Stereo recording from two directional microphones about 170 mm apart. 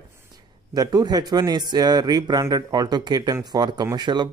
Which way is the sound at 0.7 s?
25° right (ahead or behind).